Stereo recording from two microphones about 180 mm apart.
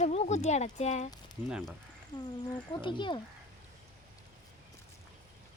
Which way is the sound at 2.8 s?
25° left (ahead or behind).